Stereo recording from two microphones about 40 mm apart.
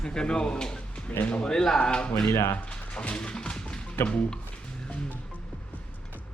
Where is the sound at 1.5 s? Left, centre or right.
Centre.